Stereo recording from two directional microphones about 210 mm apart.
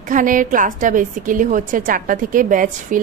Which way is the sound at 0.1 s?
40° right (ahead or behind).